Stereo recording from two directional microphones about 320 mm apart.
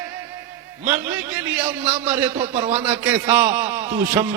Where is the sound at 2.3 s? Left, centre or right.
Centre.